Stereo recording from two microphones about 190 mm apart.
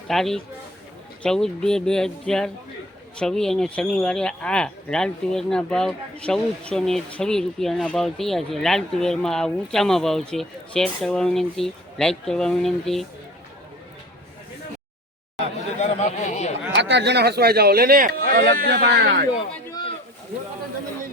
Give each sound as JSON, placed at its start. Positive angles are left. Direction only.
{"t": 0.1, "sound": "speech", "side_deg": 0}
{"t": 15.8, "sound": "speech", "side_deg": 35}
{"t": 16.7, "sound": "speech", "side_deg": -65}